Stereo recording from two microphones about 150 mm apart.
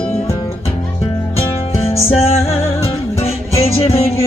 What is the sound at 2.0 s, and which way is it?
Music, 40° left (ahead or behind).